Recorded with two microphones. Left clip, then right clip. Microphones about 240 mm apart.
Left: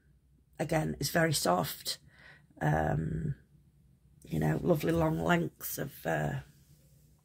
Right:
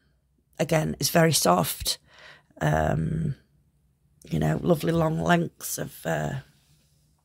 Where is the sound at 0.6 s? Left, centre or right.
Right.